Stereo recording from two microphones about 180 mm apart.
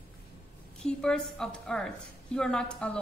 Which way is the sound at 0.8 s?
5° left (ahead or behind).